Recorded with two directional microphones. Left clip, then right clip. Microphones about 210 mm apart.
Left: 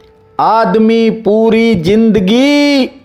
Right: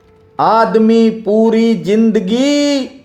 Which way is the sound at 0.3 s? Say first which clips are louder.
Left 1 dB; 30° left (ahead or behind).